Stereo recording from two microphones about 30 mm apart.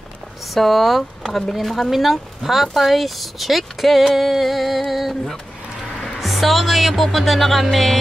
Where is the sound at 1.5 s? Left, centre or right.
Centre.